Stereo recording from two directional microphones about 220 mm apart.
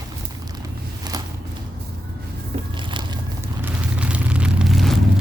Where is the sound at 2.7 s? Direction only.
20° right (ahead or behind).